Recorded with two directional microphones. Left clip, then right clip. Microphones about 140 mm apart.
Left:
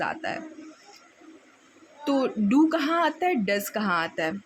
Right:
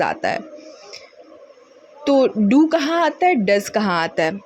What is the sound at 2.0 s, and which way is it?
A woman's voice, 30° right (ahead or behind).